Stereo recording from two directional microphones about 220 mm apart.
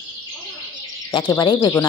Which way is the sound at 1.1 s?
20° left (ahead or behind).